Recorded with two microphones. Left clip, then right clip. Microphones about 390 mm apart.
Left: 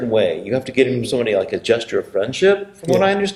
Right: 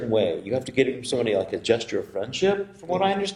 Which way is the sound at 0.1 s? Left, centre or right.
Right.